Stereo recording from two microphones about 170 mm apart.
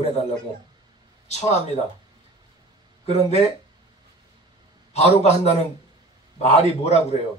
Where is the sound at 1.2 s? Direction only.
40° left (ahead or behind).